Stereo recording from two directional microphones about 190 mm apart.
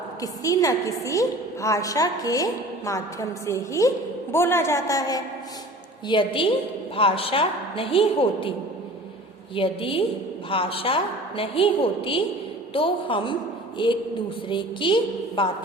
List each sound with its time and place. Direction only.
0.2 s a woman's voice: 20° left (ahead or behind)
9.6 s a woman's voice: 30° left (ahead or behind)